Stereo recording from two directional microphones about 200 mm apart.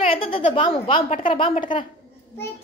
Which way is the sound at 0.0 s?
25° left (ahead or behind).